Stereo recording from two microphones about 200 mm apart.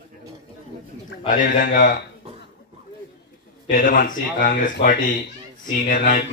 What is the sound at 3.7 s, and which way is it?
A man's voice, 45° left (ahead or behind).